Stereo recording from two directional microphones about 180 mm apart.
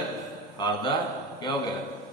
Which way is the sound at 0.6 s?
25° left (ahead or behind).